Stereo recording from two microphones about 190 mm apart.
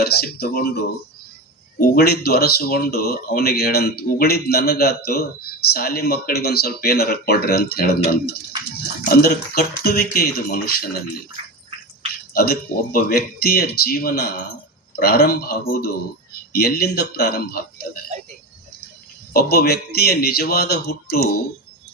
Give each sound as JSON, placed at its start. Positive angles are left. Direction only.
{"t": 0.0, "sound": "speech", "side_deg": 55}
{"t": 2.0, "sound": "speech", "side_deg": 55}
{"t": 11.4, "sound": "drip", "side_deg": -30}
{"t": 12.3, "sound": "speech", "side_deg": 50}
{"t": 19.3, "sound": "speech", "side_deg": 55}